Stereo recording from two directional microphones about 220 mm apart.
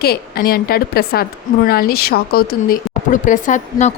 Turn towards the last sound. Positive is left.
turn(degrees=35)  # may be behind; listen again after turning